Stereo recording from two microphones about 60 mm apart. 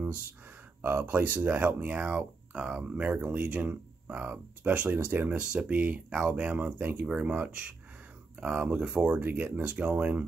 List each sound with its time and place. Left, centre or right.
0.0 s speech: right
5.3 s speech: centre